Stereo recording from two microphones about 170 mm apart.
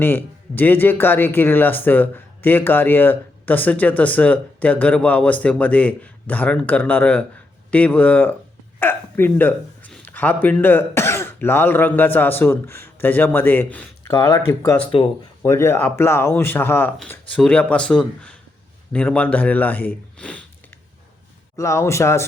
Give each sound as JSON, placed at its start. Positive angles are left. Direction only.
{"t": 0.0, "sound": "speech", "side_deg": 10}
{"t": 14.1, "sound": "speech", "side_deg": 20}
{"t": 14.8, "sound": "speech", "side_deg": 30}
{"t": 15.4, "sound": "speech", "side_deg": 15}
{"t": 21.5, "sound": "speech", "side_deg": 15}